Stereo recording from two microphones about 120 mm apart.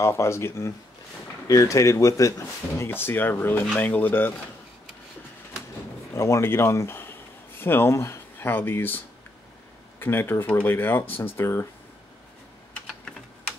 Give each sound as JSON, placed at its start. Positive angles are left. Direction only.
{"t": 0.0, "sound": "speech", "side_deg": 20}
{"t": 6.1, "sound": "speech", "side_deg": 25}